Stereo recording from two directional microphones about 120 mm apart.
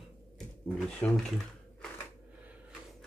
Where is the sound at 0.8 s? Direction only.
10° left (ahead or behind).